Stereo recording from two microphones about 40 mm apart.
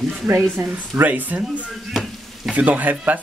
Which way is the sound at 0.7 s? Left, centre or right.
Right.